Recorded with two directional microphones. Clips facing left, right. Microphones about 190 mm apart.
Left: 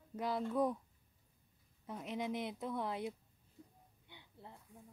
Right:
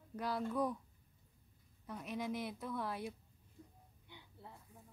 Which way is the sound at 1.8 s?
20° left (ahead or behind).